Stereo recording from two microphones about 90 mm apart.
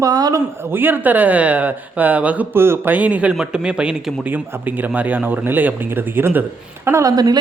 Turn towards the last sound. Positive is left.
turn(degrees=-45)  # may be behind; listen again after turning